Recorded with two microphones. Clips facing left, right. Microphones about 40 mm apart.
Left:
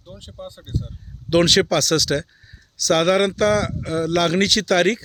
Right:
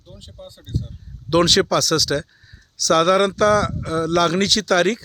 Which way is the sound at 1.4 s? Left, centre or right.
Left.